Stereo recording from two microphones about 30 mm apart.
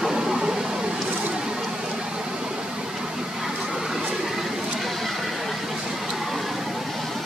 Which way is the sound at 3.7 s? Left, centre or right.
Centre.